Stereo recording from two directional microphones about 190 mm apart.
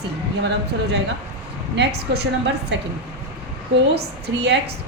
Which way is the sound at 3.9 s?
60° right (ahead or behind).